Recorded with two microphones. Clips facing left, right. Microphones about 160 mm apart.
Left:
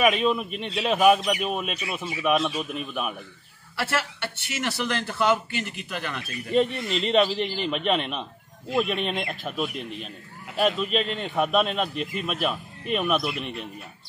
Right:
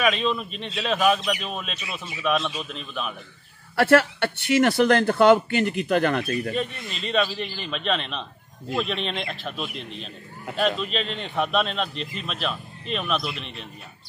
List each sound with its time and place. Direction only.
0.0 s a man's voice: 15° left (ahead or behind)
3.7 s speech: 55° right (ahead or behind)
6.5 s a man's voice: 20° left (ahead or behind)